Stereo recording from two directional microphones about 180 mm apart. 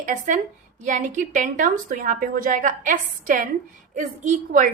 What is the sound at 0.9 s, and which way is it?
A woman's voice, 45° right (ahead or behind).